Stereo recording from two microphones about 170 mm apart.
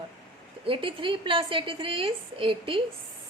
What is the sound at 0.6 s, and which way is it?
A woman's voice, 30° right (ahead or behind).